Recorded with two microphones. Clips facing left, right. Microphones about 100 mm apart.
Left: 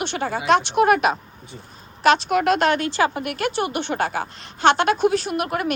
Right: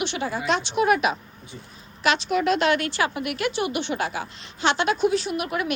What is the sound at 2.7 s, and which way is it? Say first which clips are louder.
A woman's voice: left 3 dB; 30° left (ahead or behind).